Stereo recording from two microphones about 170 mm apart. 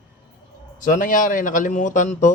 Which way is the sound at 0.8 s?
50° left (ahead or behind).